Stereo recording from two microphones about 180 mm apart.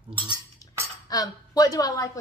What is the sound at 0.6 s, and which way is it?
Cutlery, 20° left (ahead or behind).